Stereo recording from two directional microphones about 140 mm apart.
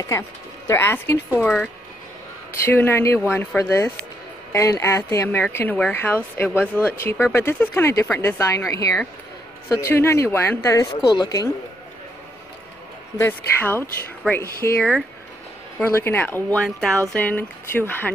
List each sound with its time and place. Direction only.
0.7 s speech: 20° left (ahead or behind)
2.5 s speech: 15° left (ahead or behind)
13.2 s speech: 15° left (ahead or behind)
15.8 s speech: 20° left (ahead or behind)